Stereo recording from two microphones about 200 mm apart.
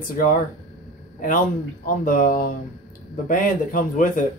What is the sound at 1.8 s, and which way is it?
A man's voice, 45° left (ahead or behind).